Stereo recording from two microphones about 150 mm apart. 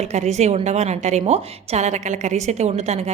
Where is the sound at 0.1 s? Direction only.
50° right (ahead or behind).